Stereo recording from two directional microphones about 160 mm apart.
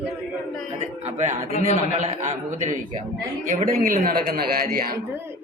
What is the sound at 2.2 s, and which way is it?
A man's voice, 50° right (ahead or behind).